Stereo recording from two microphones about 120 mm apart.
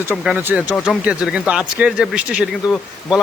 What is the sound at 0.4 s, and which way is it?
Speech, 10° right (ahead or behind).